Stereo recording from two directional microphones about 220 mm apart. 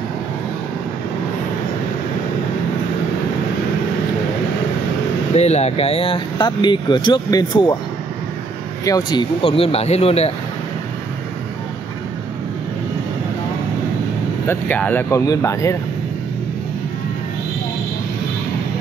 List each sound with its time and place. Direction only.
5.3 s speech: 30° left (ahead or behind)
8.8 s speech: 20° left (ahead or behind)
14.5 s speech: 5° left (ahead or behind)